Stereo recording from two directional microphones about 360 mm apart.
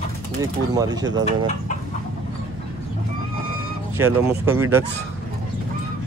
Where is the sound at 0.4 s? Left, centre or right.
Centre.